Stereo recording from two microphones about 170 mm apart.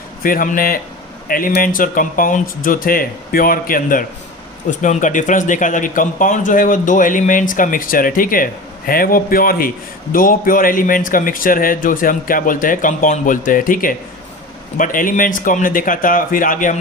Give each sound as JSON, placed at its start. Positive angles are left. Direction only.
{"t": 0.2, "sound": "a man's voice", "side_deg": 55}